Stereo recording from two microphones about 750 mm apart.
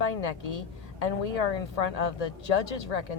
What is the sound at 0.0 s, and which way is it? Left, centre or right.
A woman's voice, left.